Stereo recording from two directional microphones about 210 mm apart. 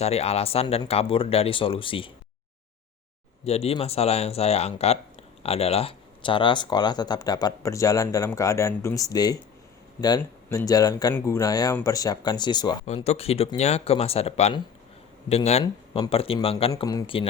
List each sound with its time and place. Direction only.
0.0 s speech: 30° left (ahead or behind)
3.4 s speech: 30° left (ahead or behind)
12.8 s speech: 30° left (ahead or behind)